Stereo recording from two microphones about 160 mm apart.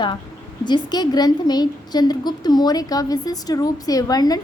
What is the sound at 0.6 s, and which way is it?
A woman's voice, 25° left (ahead or behind).